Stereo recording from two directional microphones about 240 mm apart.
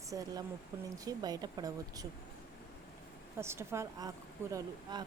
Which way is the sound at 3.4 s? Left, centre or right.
Centre.